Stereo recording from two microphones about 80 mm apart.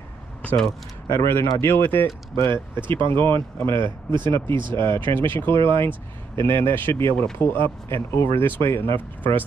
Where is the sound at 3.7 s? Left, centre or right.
Right.